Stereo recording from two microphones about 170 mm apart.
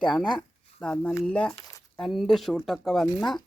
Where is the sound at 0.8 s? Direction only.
5° left (ahead or behind).